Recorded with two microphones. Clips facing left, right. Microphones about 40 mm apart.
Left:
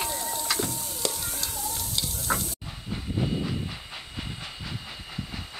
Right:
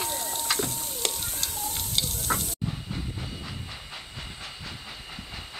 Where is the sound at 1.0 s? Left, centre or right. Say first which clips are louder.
Even; right.